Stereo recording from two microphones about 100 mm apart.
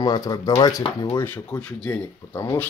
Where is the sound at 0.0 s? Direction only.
35° left (ahead or behind).